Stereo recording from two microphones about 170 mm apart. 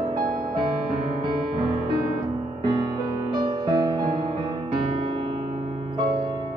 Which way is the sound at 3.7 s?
25° right (ahead or behind).